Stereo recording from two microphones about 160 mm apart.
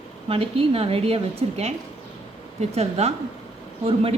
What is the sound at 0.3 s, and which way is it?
A woman's voice, 35° right (ahead or behind).